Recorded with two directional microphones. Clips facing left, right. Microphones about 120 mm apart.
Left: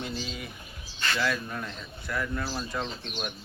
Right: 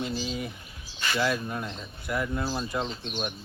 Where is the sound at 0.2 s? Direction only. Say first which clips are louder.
Right 5 dB; 25° right (ahead or behind).